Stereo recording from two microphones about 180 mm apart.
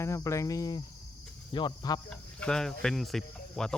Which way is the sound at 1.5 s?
25° left (ahead or behind).